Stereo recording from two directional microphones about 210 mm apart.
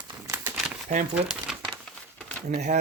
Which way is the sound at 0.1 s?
10° right (ahead or behind).